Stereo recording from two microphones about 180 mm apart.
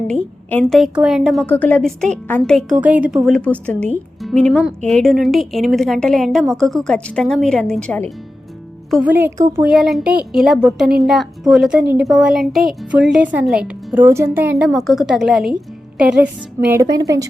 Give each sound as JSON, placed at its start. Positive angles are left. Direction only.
{"t": 0.1, "sound": "a woman's voice", "side_deg": 5}
{"t": 8.9, "sound": "a woman's voice", "side_deg": -5}
{"t": 9.6, "sound": "a woman's voice", "side_deg": 0}
{"t": 16.8, "sound": "a woman's voice", "side_deg": -20}